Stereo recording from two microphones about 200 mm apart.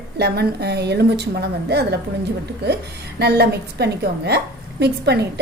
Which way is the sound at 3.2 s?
55° right (ahead or behind).